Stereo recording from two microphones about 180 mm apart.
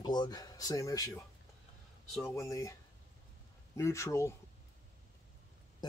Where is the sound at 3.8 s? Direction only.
15° left (ahead or behind).